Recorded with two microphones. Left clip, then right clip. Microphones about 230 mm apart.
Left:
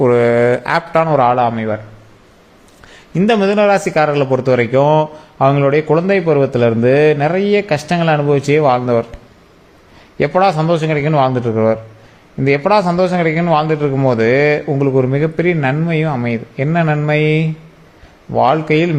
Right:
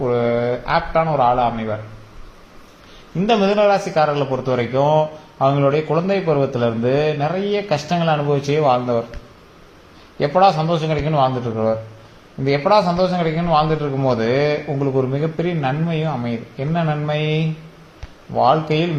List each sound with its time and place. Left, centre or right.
0.0 s a man's voice: left
3.2 s a man's voice: left
10.2 s a man's voice: left